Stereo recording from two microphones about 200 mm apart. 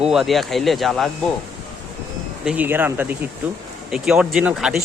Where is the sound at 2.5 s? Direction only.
10° right (ahead or behind).